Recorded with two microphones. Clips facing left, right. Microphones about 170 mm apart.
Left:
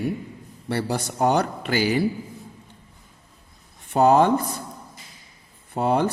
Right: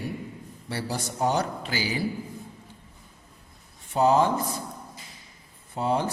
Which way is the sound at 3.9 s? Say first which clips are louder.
Left 4 dB; 60° left (ahead or behind).